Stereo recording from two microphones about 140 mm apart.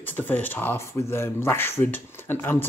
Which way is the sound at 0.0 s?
15° left (ahead or behind).